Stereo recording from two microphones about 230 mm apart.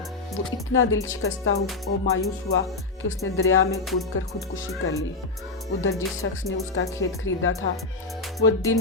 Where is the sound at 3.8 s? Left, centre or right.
Centre.